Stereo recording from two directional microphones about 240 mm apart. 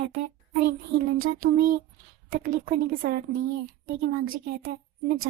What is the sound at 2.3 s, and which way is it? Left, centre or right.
Child singing, right.